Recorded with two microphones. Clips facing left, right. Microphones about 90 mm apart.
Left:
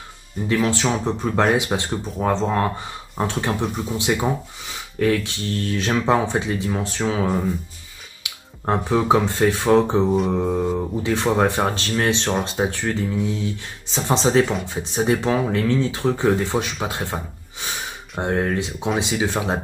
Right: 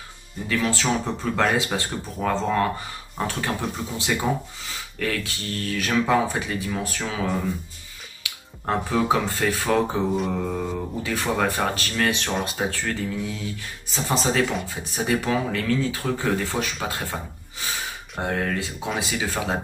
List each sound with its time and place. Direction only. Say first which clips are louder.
0.7 s speech: left 3 dB; 20° left (ahead or behind)
10.2 s mantra: left 5 dB; 20° left (ahead or behind)
11.0 s speech: left 5 dB; 25° left (ahead or behind)